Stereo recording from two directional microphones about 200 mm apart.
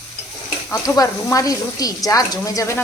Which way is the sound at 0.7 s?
15° left (ahead or behind).